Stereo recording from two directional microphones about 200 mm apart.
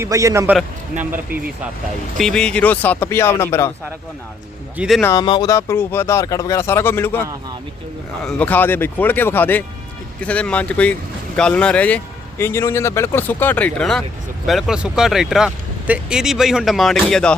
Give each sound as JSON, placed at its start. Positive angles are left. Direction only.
{"t": 0.0, "sound": "a man's voice", "side_deg": -15}
{"t": 2.1, "sound": "speech", "side_deg": 5}
{"t": 4.8, "sound": "speech", "side_deg": 0}
{"t": 5.0, "sound": "speech", "side_deg": 20}
{"t": 8.2, "sound": "speech", "side_deg": 5}